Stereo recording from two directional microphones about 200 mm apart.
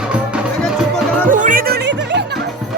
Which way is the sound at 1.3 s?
40° right (ahead or behind).